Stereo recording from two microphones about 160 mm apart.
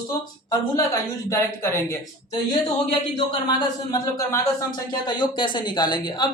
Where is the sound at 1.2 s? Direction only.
15° left (ahead or behind).